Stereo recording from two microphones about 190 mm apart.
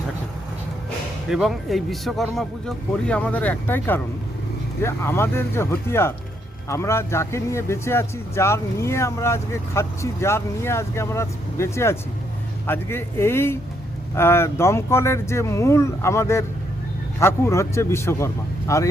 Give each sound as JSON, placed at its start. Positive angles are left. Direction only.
{"t": 1.3, "sound": "a man's voice", "side_deg": 0}